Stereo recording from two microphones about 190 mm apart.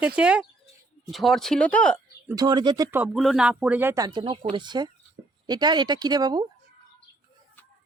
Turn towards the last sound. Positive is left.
turn(degrees=-20)  # may be behind; listen again after turning